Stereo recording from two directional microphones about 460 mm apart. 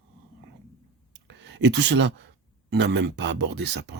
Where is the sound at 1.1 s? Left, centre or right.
Right.